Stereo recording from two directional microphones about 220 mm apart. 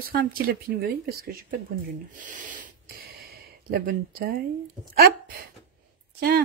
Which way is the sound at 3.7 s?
40° right (ahead or behind).